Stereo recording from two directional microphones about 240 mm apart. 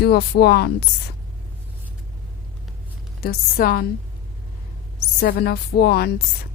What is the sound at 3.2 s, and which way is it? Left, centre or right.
Speech, left.